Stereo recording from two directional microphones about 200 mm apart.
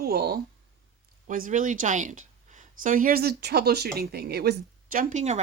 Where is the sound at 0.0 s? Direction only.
50° right (ahead or behind).